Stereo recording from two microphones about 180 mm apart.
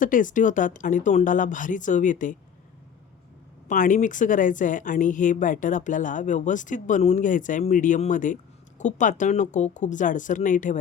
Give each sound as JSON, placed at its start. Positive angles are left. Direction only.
{"t": 0.0, "sound": "speech", "side_deg": 45}
{"t": 3.7, "sound": "speech", "side_deg": 45}